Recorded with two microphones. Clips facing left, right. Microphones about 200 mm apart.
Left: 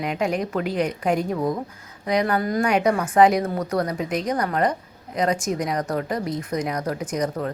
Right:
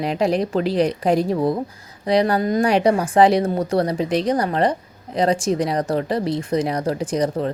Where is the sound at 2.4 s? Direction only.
20° right (ahead or behind).